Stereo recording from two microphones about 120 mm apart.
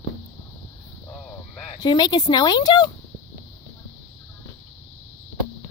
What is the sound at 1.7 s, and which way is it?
A woman's voice, 35° left (ahead or behind).